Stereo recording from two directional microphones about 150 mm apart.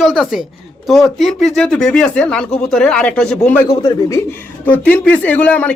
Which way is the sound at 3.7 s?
35° left (ahead or behind).